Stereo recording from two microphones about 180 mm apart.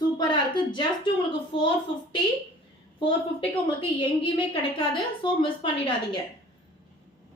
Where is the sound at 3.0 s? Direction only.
30° left (ahead or behind).